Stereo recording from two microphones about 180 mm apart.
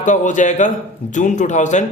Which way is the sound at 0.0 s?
45° left (ahead or behind).